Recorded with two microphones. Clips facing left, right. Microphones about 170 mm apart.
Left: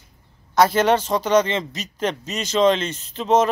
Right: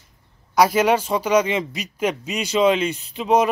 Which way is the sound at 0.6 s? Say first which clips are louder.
Even; 10° right (ahead or behind).